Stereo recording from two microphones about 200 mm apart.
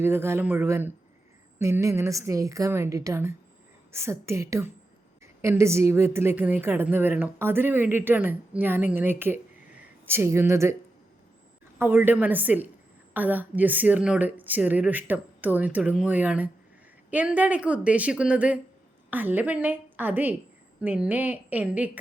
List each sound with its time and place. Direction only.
0.0 s speech: 10° right (ahead or behind)
11.8 s speech: 10° right (ahead or behind)